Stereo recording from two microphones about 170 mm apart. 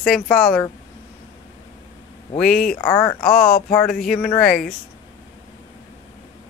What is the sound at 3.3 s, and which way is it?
Speech, 60° left (ahead or behind).